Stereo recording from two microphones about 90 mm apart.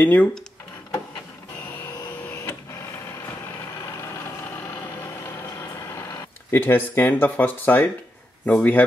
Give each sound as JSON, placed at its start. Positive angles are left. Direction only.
{"t": 0.0, "sound": "speech", "side_deg": 20}
{"t": 2.3, "sound": "printer", "side_deg": 25}
{"t": 5.2, "sound": "vehicle", "side_deg": 25}
{"t": 6.5, "sound": "speech", "side_deg": 20}